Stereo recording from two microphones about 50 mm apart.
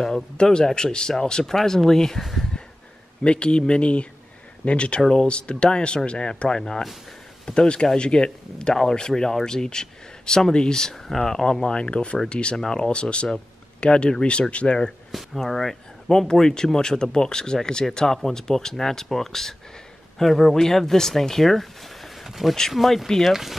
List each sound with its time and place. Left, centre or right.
0.0 s speech: centre
3.3 s speech: left
11.6 s speech: centre
15.0 s speech: centre
23.3 s speech: centre